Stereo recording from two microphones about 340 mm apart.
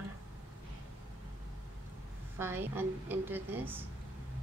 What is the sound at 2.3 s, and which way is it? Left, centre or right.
Speech, centre.